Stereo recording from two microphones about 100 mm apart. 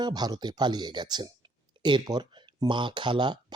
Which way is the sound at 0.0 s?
45° right (ahead or behind).